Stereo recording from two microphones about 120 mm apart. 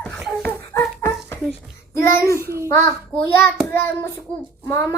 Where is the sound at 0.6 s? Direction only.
25° left (ahead or behind).